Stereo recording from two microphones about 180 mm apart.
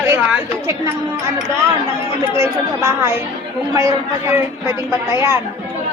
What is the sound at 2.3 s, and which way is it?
A woman's voice, 15° right (ahead or behind).